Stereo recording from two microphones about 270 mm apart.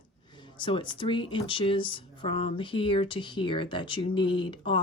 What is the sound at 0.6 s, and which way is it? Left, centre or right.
Speech, centre.